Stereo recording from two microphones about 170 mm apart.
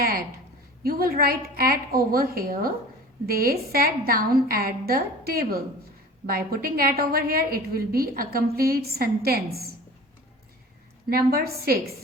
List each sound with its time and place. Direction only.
0.0 s a sound: 60° right (ahead or behind)
0.8 s a woman's voice: 60° right (ahead or behind)
11.1 s a woman's voice: 60° right (ahead or behind)